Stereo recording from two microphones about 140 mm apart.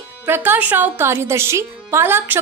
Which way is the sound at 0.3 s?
15° right (ahead or behind).